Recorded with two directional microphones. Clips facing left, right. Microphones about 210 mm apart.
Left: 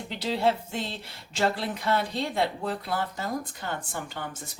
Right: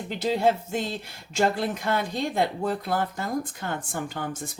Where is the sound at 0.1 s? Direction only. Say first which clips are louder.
Right 3 dB; 45° right (ahead or behind).